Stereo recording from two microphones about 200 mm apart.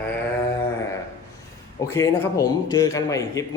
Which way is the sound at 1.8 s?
15° left (ahead or behind).